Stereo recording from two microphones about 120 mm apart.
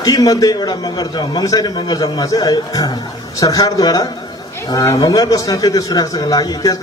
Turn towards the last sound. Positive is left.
turn(degrees=30)  # may be behind; listen again after turning